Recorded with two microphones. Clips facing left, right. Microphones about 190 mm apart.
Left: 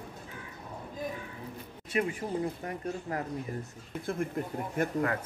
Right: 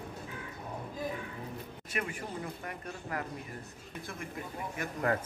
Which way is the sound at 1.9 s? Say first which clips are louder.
Left 7 dB; 25° left (ahead or behind).